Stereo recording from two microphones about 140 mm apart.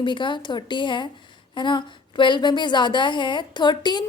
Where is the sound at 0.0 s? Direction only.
35° left (ahead or behind).